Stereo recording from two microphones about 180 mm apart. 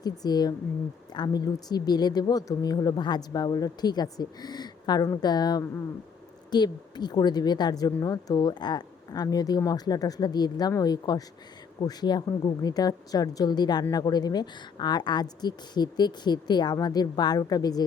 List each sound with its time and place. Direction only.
0.0 s a woman's voice: 20° left (ahead or behind)